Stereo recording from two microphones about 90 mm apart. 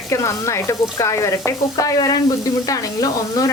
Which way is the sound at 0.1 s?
35° left (ahead or behind).